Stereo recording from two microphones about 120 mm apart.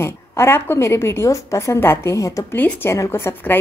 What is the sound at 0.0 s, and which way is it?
A woman's voice, 20° left (ahead or behind).